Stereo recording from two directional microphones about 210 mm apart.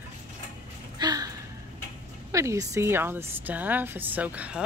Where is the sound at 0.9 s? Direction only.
20° right (ahead or behind).